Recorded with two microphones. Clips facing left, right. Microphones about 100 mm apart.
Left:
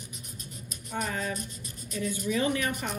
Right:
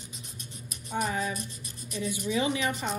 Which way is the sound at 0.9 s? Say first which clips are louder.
Right 2 dB; 15° right (ahead or behind).